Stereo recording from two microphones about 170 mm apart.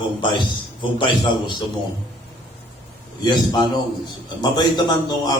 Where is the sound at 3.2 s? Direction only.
25° left (ahead or behind).